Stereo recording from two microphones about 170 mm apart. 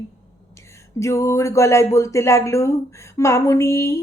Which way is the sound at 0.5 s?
15° left (ahead or behind).